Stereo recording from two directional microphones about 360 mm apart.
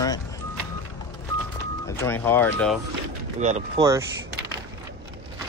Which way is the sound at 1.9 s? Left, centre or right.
Centre.